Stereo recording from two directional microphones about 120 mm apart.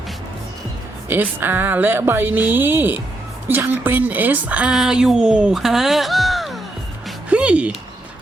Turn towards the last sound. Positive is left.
turn(degrees=-10)  # may be behind; listen again after turning